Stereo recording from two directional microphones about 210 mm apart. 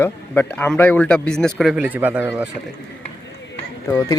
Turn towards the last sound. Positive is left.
turn(degrees=15)  # may be behind; listen again after turning